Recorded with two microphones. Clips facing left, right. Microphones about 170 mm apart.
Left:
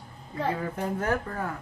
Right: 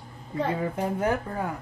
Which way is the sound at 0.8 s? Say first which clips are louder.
Right 3 dB; 15° right (ahead or behind).